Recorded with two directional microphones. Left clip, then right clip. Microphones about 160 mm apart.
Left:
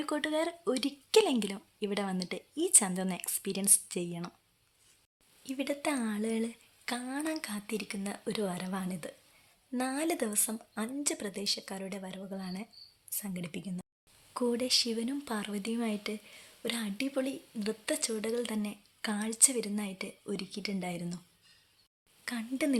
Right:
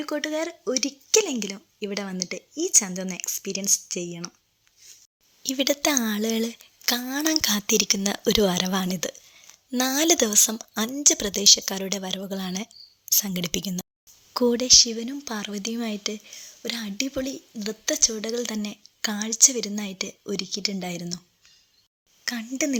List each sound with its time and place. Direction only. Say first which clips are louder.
0.0 s speech: right 4 dB; 10° right (ahead or behind)
5.4 s a woman's voice: right 11 dB; 35° right (ahead or behind)
13.3 s speech: right 13 dB; 40° right (ahead or behind); by 21.2 s 25° right (ahead or behind)
22.2 s speech: right 7 dB; 25° right (ahead or behind)